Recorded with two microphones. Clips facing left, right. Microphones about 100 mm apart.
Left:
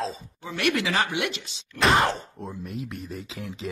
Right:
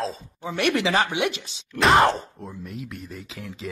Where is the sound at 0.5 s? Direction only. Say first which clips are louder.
Right 3 dB; 25° right (ahead or behind).